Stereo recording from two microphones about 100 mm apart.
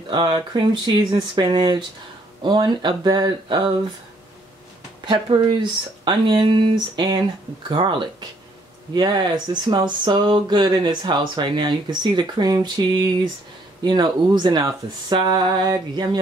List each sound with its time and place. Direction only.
0.1 s speech: 45° right (ahead or behind)
5.0 s speech: 55° right (ahead or behind)